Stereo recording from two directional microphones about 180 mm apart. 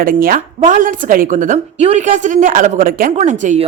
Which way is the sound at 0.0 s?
50° right (ahead or behind).